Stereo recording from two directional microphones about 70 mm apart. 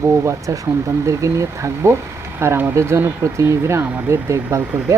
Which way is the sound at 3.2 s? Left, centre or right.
Right.